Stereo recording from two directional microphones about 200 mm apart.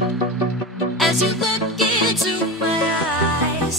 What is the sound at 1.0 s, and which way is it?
Music, centre (ahead or behind).